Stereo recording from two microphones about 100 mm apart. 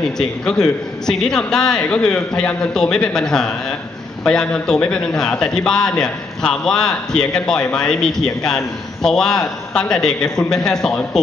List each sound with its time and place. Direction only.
0.2 s a man's voice: 5° left (ahead or behind)